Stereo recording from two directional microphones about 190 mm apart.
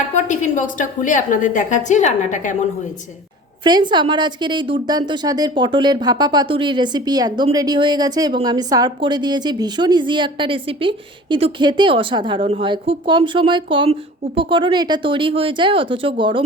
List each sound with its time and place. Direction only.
0.1 s a woman's voice: 40° left (ahead or behind)
3.6 s a woman's voice: 25° right (ahead or behind)